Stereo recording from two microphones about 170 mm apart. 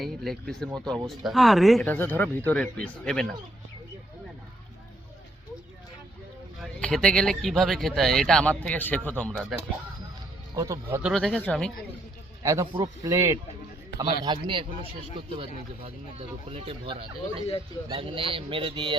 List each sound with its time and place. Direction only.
0.0 s speech: centre (ahead or behind)
1.9 s speech: 10° left (ahead or behind)
6.6 s speech: 5° left (ahead or behind)
10.5 s speech: 20° right (ahead or behind)
11.1 s speech: 5° left (ahead or behind)
12.4 s speech: 20° right (ahead or behind)